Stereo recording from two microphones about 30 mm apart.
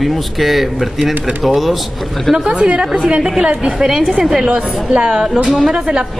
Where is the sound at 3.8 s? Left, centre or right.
Centre.